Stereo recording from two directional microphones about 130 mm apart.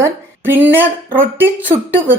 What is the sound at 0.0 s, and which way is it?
A woman's voice, 15° right (ahead or behind).